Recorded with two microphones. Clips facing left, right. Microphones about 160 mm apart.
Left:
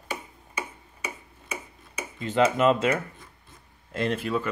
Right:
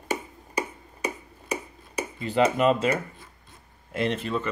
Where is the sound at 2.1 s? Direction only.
Centre (ahead or behind).